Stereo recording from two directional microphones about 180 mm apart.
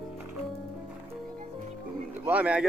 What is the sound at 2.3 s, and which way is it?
Speech, 10° right (ahead or behind).